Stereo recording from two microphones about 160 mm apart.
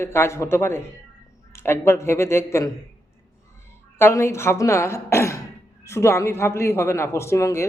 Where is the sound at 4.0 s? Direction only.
15° left (ahead or behind).